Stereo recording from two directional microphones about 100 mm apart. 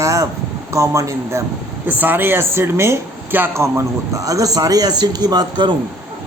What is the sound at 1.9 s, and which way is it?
Speech, 20° right (ahead or behind).